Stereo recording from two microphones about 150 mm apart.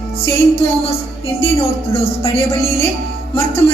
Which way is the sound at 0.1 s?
40° left (ahead or behind).